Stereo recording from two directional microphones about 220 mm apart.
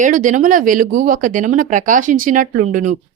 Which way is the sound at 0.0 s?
35° right (ahead or behind).